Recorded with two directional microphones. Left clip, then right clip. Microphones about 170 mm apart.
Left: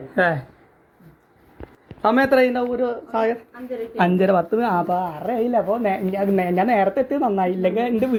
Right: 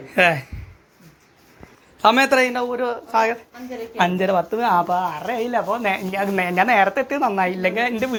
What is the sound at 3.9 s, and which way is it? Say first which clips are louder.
A woman's voice: left 1 dB; 35° left (ahead or behind).